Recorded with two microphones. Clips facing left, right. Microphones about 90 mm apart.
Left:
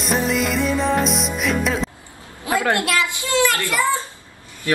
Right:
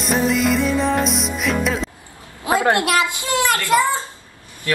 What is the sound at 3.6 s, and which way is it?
Speech, 20° right (ahead or behind).